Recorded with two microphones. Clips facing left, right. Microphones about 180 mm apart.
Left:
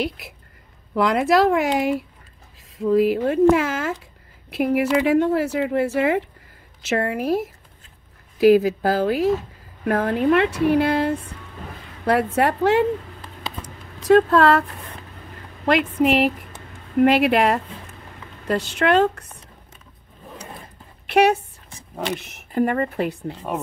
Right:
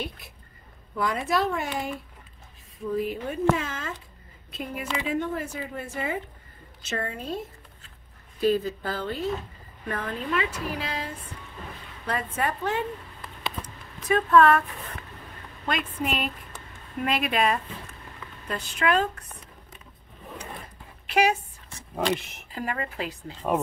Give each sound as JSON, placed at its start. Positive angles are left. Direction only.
{"t": 0.9, "sound": "a woman's voice", "side_deg": 85}
{"t": 9.8, "sound": "a woman's voice", "side_deg": 75}
{"t": 14.0, "sound": "a woman's voice", "side_deg": 85}
{"t": 15.6, "sound": "a woman's voice", "side_deg": 80}
{"t": 21.1, "sound": "speech", "side_deg": 65}
{"t": 22.0, "sound": "speech", "side_deg": 0}
{"t": 22.5, "sound": "a woman's voice", "side_deg": 55}